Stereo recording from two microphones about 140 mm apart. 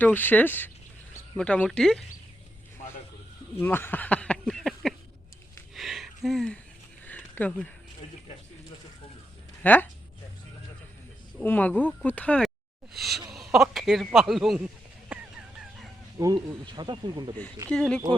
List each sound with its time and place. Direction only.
0.0 s a man's voice: 15° left (ahead or behind)
3.6 s a sound: 15° left (ahead or behind)
9.6 s speech: 10° left (ahead or behind)
11.3 s a man's voice: 10° left (ahead or behind)
15.1 s a sound: 10° right (ahead or behind)
16.1 s speech: 25° right (ahead or behind)
17.7 s a man's voice: 5° left (ahead or behind)